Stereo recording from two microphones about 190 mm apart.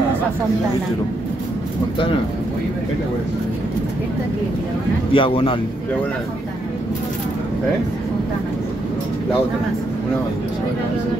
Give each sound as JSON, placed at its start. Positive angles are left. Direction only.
{"t": 5.1, "sound": "a man's voice", "side_deg": 30}